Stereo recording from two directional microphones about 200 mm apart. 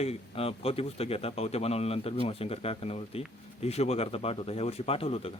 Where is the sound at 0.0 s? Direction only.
30° left (ahead or behind).